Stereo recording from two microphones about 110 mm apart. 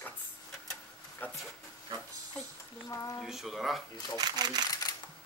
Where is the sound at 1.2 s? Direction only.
15° left (ahead or behind).